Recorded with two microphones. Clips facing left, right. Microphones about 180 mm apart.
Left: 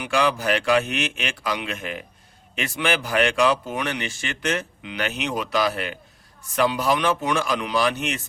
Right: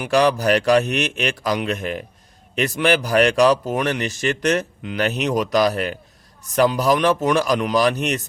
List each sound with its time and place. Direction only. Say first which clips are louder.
0.0 s speech: right 5 dB; 40° right (ahead or behind)